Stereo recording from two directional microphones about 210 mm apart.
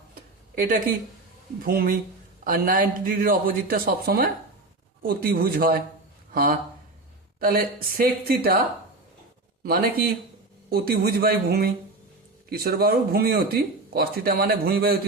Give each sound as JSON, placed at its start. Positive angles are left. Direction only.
{"t": 0.1, "sound": "a sound", "side_deg": -40}
{"t": 1.6, "sound": "speech", "side_deg": -45}
{"t": 9.6, "sound": "speech", "side_deg": -45}